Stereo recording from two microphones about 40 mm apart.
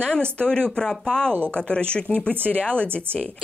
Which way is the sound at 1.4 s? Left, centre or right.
Left.